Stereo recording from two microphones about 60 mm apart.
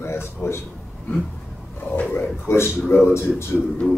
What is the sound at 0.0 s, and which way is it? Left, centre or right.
Speech, left.